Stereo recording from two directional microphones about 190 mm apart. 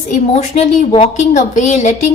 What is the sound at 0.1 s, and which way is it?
A woman's voice, 35° left (ahead or behind).